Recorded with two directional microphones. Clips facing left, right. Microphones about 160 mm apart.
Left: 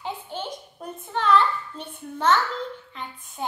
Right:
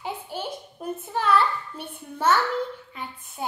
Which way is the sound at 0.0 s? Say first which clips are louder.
Even; 10° right (ahead or behind).